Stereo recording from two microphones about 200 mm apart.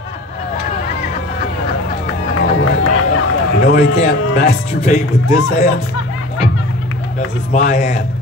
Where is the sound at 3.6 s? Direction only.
35° left (ahead or behind).